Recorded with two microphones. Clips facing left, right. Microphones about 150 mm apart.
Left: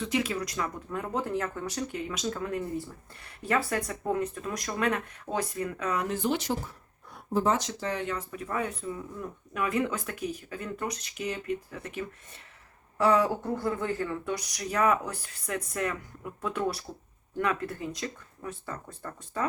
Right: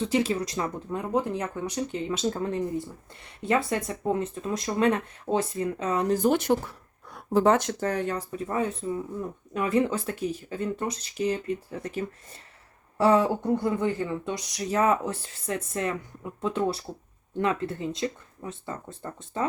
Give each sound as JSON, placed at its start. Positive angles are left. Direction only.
{"t": 0.0, "sound": "speech", "side_deg": -30}